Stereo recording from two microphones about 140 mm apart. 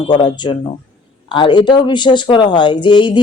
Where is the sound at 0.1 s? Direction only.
35° left (ahead or behind).